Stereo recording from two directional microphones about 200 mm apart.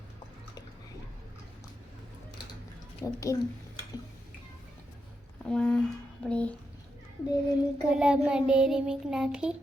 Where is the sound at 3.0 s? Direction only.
15° left (ahead or behind).